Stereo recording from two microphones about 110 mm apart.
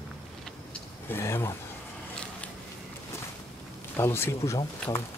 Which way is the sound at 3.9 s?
20° left (ahead or behind).